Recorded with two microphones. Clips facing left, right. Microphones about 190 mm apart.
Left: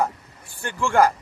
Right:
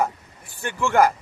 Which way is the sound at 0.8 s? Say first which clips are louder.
Even; 15° left (ahead or behind).